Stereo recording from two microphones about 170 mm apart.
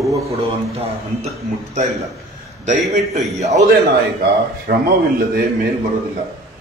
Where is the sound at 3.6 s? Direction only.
65° right (ahead or behind).